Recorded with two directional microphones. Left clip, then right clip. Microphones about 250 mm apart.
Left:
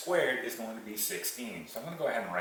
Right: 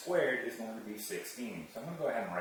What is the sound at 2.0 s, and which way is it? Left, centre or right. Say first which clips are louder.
Speech: left 3 dB; centre.